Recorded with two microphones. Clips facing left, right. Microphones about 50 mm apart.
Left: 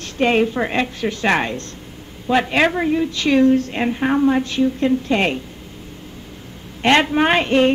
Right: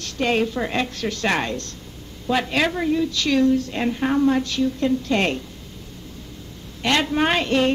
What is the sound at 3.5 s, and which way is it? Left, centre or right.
Speech, left.